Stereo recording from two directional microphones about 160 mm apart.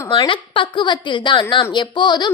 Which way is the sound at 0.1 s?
30° left (ahead or behind).